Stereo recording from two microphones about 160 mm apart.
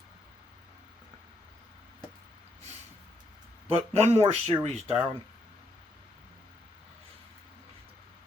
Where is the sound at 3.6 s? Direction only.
40° right (ahead or behind).